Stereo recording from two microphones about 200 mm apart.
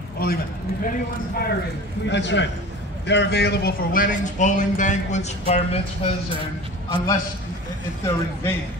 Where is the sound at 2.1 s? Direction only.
60° left (ahead or behind); by 5.8 s 30° left (ahead or behind).